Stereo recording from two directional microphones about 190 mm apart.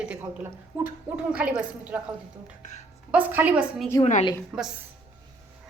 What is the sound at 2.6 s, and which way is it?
Speech, 40° left (ahead or behind).